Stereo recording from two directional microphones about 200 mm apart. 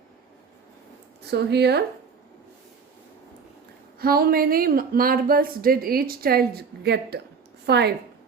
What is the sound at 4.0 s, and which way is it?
A woman's voice, 50° right (ahead or behind).